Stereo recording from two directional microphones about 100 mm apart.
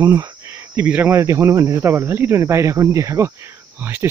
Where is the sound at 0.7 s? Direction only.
20° right (ahead or behind).